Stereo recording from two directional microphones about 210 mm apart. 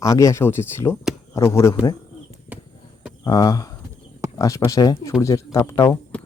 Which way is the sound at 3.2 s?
20° left (ahead or behind).